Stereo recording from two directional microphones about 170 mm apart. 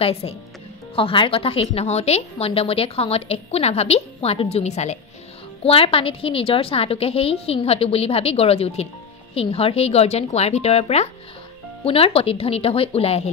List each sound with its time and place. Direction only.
0.0 s a woman's voice: 35° left (ahead or behind)